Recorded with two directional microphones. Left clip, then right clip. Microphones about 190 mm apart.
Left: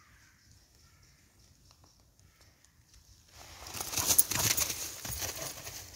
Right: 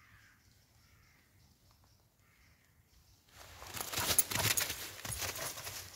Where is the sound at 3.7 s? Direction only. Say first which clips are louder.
Left 3 dB; 25° right (ahead or behind).